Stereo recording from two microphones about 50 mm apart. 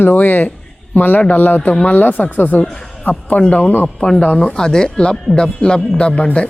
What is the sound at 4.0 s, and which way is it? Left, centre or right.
Speech, centre.